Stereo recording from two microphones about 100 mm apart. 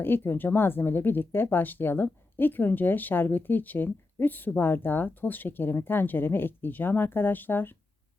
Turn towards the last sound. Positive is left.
turn(degrees=20)  # may be behind; listen again after turning